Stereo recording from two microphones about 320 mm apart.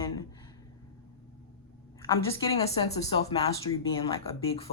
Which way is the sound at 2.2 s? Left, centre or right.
Centre.